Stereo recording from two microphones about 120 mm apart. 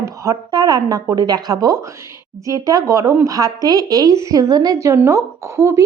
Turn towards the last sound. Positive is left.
turn(degrees=-25)  # may be behind; listen again after turning